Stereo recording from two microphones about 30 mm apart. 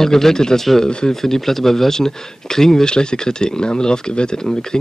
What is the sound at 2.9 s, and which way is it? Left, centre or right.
Speech, left.